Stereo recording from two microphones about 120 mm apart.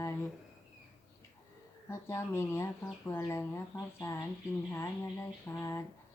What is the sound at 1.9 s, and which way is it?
Speech, 20° left (ahead or behind).